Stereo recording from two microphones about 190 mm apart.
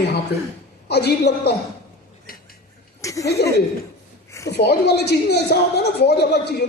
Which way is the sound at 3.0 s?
15° left (ahead or behind).